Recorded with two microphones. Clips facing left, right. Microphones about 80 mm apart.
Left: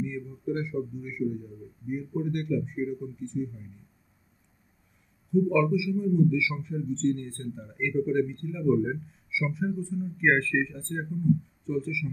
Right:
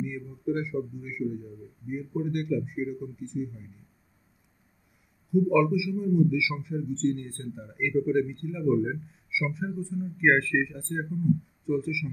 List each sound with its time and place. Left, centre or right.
0.0 s a man's voice: centre
5.3 s a man's voice: centre